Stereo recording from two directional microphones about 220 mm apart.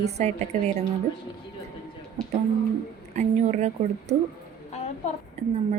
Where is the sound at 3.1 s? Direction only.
30° right (ahead or behind).